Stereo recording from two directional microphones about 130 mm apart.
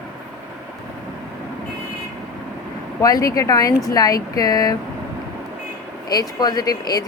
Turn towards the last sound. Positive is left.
turn(degrees=30)  # may be behind; listen again after turning